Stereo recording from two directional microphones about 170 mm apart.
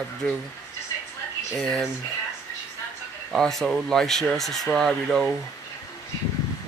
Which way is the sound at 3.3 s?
Centre (ahead or behind).